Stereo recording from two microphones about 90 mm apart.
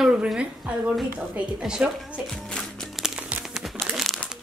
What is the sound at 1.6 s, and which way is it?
Speech, 10° right (ahead or behind).